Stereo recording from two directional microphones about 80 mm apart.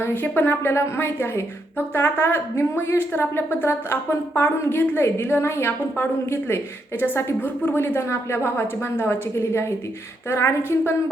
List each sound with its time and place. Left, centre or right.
0.0 s a woman's voice: left